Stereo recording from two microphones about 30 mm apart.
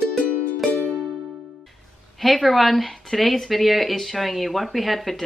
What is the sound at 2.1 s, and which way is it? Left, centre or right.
Speech, centre.